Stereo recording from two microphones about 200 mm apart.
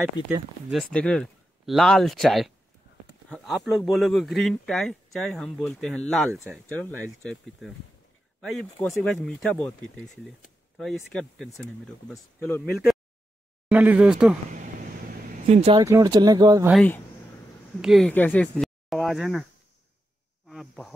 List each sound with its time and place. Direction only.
0.9 s speech: 5° left (ahead or behind)
13.7 s speech: 5° right (ahead or behind)
15.4 s speech: 30° right (ahead or behind)
15.8 s speech: 15° right (ahead or behind)
17.8 s speech: 5° left (ahead or behind)
20.4 s speech: centre (ahead or behind)